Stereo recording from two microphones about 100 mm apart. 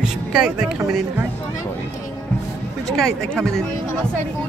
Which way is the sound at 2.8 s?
5° left (ahead or behind).